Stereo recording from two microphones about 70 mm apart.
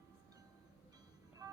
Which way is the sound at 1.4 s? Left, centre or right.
Right.